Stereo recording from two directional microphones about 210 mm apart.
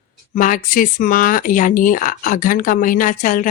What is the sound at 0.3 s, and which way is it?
Speech, 40° left (ahead or behind).